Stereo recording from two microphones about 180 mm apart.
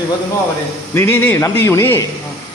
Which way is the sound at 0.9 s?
10° left (ahead or behind).